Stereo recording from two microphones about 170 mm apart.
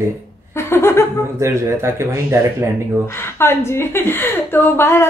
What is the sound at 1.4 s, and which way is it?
Speech, 15° right (ahead or behind).